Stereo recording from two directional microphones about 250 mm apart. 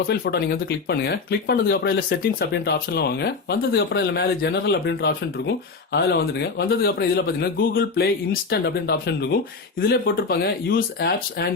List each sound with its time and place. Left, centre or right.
0.0 s speech: left